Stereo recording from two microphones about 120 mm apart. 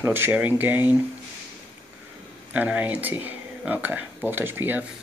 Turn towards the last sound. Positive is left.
turn(degrees=-15)  # may be behind; listen again after turning